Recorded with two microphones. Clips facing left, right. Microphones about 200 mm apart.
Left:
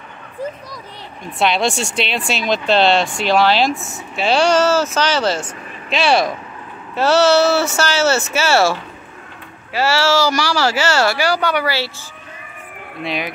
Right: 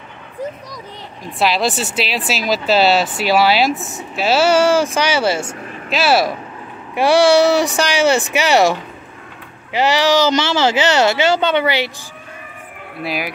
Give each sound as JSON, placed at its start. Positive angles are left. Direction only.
{"t": 1.2, "sound": "speech", "side_deg": 0}
{"t": 13.0, "sound": "speech", "side_deg": -5}